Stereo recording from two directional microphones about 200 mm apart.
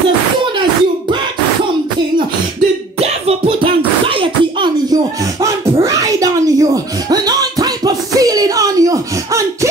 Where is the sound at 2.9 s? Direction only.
30° right (ahead or behind).